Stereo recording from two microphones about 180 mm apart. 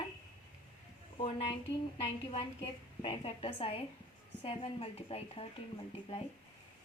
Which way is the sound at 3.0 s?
30° left (ahead or behind).